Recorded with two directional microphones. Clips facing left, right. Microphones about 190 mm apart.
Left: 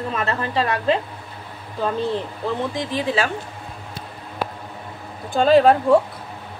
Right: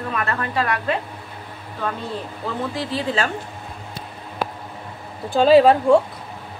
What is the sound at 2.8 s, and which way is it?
Speech, 10° left (ahead or behind).